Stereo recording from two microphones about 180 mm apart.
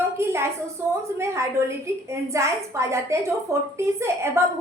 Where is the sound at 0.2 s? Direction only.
15° right (ahead or behind).